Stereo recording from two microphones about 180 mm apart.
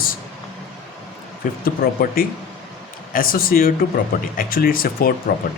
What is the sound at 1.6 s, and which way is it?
Speech, 55° left (ahead or behind).